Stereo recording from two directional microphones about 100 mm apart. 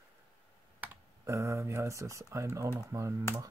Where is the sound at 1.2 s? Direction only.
30° right (ahead or behind).